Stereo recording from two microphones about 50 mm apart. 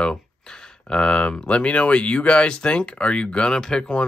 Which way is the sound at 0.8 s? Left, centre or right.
Centre.